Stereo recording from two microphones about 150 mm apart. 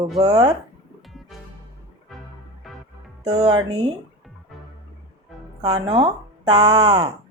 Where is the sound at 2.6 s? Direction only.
Centre (ahead or behind).